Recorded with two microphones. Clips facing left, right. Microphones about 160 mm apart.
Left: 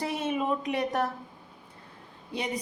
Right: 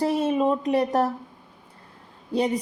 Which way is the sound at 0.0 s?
35° right (ahead or behind).